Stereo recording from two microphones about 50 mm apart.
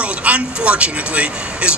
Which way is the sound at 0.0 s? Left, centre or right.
Right.